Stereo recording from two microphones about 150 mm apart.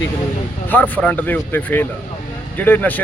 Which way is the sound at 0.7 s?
10° left (ahead or behind).